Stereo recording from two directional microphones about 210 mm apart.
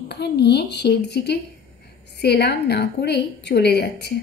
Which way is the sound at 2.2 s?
55° left (ahead or behind).